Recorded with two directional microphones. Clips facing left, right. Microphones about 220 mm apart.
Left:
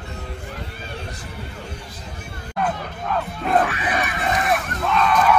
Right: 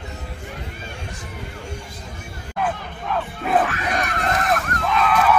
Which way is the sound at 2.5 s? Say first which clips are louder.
Left 1 dB; centre (ahead or behind).